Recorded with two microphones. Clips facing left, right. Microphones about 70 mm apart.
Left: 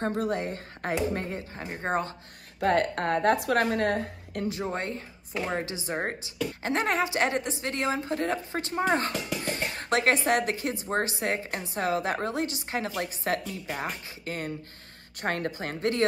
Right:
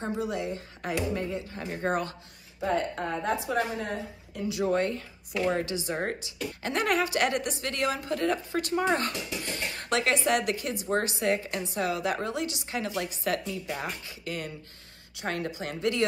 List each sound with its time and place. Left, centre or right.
0.0 s speech: left
1.5 s speech: left
2.6 s a woman's voice: left
4.5 s speech: left